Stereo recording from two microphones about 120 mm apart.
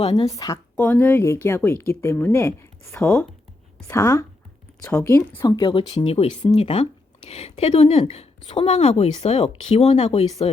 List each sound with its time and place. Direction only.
0.0 s speech: 50° left (ahead or behind)
0.3 s speech: 30° left (ahead or behind)
0.8 s speech: 15° left (ahead or behind)
5.5 s speech: 35° left (ahead or behind)
6.0 s a woman's voice: 55° left (ahead or behind)